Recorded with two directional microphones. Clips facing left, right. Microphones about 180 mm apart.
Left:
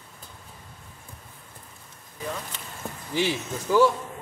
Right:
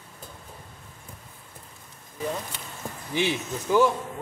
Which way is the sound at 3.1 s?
Centre (ahead or behind).